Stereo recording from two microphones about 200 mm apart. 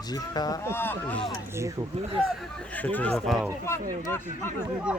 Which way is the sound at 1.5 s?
15° right (ahead or behind).